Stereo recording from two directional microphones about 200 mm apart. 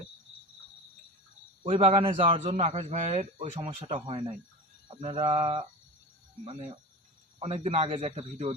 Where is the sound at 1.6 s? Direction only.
30° right (ahead or behind).